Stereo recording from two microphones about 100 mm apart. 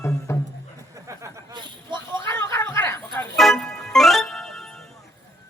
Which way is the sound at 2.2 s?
25° left (ahead or behind).